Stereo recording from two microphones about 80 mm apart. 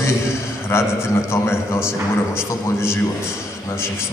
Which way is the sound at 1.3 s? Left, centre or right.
Left.